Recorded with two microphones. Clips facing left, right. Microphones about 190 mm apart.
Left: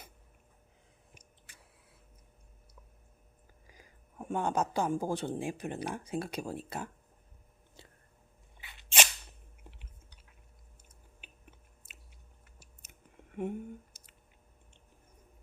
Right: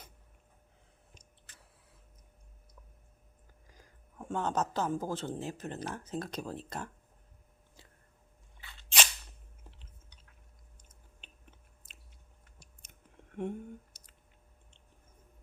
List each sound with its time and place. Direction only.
1.5 s a sound: 10° left (ahead or behind)
3.7 s a woman's voice: 10° left (ahead or behind)
8.6 s a sound: 15° left (ahead or behind)
11.2 s chewing: 5° left (ahead or behind)
11.9 s biting: 5° left (ahead or behind)
12.5 s chewing: 5° left (ahead or behind)